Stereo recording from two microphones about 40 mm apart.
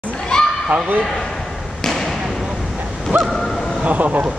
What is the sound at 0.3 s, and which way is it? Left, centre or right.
Children playing, centre.